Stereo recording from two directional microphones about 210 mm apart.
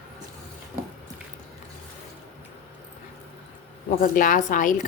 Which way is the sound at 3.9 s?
40° left (ahead or behind).